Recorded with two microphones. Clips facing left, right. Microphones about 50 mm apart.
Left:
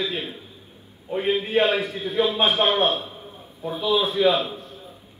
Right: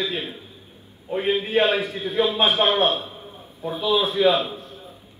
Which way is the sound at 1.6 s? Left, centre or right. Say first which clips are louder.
Right 1 dB; right.